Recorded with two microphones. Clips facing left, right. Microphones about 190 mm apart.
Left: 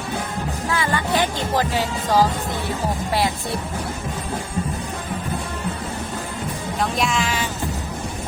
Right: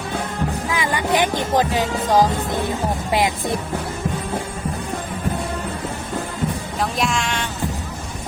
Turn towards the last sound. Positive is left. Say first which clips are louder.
# even
turn(degrees=0)  # may be behind; listen again after turning